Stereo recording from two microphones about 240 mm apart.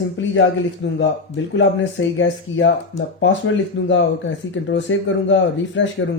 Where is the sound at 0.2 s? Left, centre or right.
Left.